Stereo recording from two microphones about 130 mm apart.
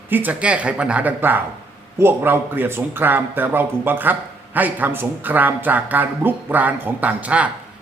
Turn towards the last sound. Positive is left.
turn(degrees=-10)  # may be behind; listen again after turning